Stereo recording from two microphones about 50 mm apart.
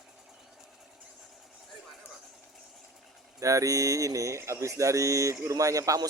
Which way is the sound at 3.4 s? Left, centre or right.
Right.